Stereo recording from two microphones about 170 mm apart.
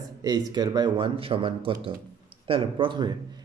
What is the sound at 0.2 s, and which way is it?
A man's voice, 25° right (ahead or behind).